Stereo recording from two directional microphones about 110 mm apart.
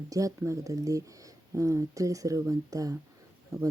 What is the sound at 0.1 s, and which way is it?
Speech, 30° right (ahead or behind).